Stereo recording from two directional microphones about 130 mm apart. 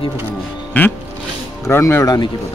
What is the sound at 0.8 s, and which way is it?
Speech, 15° left (ahead or behind).